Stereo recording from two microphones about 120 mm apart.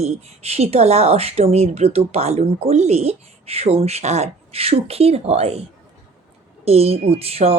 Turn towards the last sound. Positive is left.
turn(degrees=-55)  # may be behind; listen again after turning